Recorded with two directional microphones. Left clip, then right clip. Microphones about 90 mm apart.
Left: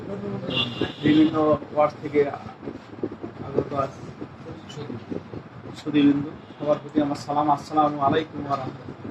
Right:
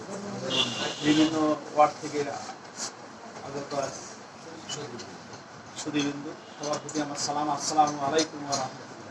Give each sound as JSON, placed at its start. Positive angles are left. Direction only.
{"t": 0.4, "sound": "speech", "side_deg": 30}
{"t": 3.7, "sound": "speech", "side_deg": 30}
{"t": 5.8, "sound": "speech", "side_deg": 35}